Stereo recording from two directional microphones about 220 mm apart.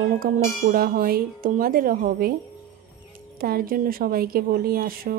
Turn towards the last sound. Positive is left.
turn(degrees=-40)  # may be behind; listen again after turning